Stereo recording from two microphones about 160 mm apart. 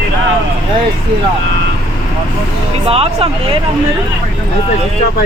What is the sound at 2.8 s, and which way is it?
Speech, 40° right (ahead or behind).